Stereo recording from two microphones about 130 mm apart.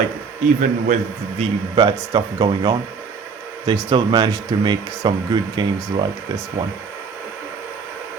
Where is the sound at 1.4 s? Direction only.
35° right (ahead or behind).